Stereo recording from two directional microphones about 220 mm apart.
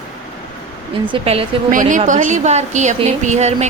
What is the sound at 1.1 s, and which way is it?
A woman's voice, 25° right (ahead or behind).